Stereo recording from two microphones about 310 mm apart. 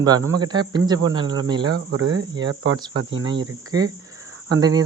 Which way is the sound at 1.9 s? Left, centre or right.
Right.